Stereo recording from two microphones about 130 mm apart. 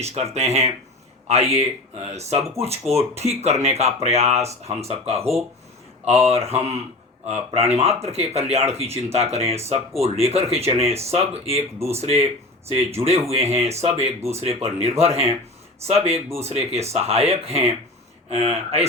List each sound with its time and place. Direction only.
0.0 s speech: 55° right (ahead or behind)